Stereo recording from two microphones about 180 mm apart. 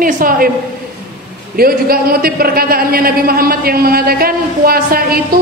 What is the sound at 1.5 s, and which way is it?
A man's voice, 55° right (ahead or behind).